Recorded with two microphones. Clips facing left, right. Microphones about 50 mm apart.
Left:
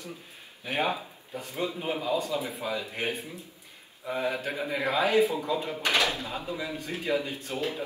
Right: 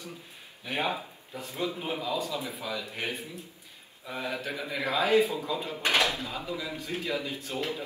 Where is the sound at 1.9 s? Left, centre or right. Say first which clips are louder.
Left 3 dB; left.